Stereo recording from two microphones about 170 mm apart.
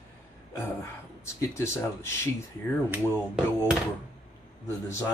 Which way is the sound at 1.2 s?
15° left (ahead or behind).